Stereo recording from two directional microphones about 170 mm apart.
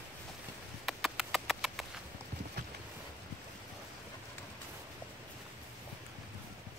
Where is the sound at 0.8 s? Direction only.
Centre (ahead or behind).